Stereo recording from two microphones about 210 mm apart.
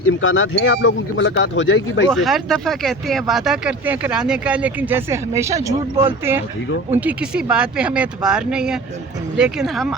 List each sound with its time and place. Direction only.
0.2 s speech: 70° left (ahead or behind)
2.0 s speech: centre (ahead or behind)